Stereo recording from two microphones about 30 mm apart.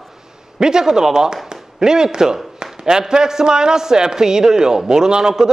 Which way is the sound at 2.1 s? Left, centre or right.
Right.